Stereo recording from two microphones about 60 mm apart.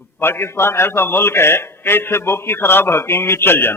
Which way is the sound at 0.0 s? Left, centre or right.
Left.